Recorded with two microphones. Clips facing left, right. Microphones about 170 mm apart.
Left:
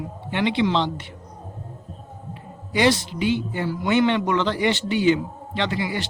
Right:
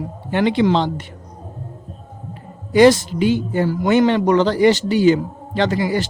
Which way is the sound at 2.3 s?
45° right (ahead or behind).